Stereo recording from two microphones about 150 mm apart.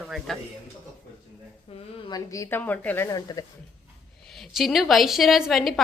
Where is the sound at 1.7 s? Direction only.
40° left (ahead or behind).